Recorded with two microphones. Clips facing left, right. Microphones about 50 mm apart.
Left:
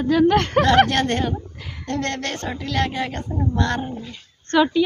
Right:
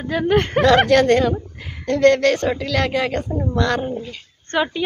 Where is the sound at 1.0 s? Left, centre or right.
Right.